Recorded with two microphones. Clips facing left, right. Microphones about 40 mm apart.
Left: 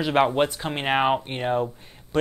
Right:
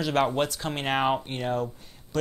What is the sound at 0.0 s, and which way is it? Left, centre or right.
Speech, left.